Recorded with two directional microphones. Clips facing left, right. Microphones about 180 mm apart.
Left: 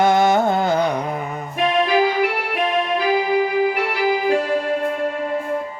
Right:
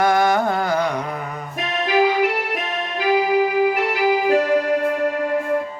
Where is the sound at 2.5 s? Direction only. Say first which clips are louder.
Left 6 dB; 40° right (ahead or behind).